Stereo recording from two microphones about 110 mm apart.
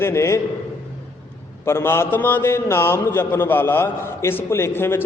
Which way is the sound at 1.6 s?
25° left (ahead or behind).